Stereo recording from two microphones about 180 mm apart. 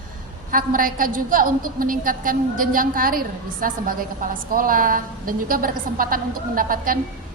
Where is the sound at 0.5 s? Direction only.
50° right (ahead or behind).